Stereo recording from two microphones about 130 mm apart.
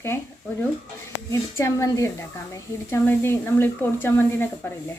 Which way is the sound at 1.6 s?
25° left (ahead or behind).